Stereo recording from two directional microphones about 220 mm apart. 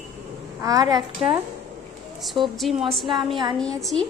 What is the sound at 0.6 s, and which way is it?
Speech, 15° right (ahead or behind).